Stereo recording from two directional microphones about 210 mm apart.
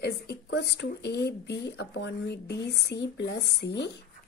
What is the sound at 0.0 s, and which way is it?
Speech, 55° left (ahead or behind).